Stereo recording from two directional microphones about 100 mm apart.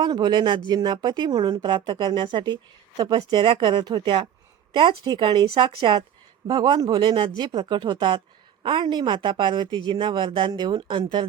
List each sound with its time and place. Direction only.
0.0 s speech: 50° right (ahead or behind)